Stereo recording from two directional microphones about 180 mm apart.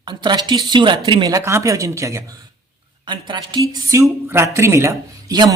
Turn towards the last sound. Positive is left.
turn(degrees=-20)  # may be behind; listen again after turning